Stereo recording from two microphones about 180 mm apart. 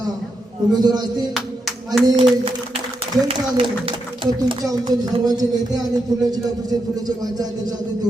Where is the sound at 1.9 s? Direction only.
Centre (ahead or behind).